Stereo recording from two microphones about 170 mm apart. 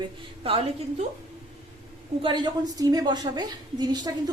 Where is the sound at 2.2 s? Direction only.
30° right (ahead or behind).